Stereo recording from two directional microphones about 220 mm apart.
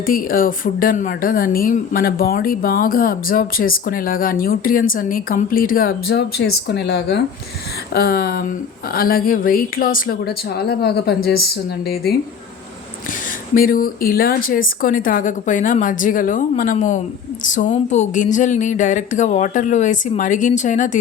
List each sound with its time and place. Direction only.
0.0 s speech: 40° left (ahead or behind)
13.5 s speech: 40° left (ahead or behind)